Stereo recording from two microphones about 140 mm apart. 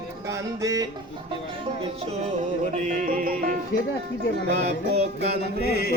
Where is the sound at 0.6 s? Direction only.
25° right (ahead or behind).